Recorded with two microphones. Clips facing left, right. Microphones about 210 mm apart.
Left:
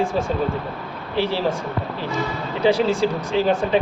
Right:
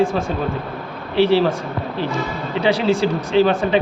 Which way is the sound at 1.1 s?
70° right (ahead or behind).